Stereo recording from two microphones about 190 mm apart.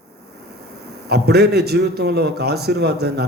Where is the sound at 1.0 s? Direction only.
60° right (ahead or behind).